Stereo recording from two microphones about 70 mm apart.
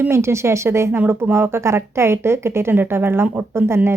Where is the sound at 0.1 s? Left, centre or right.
Right.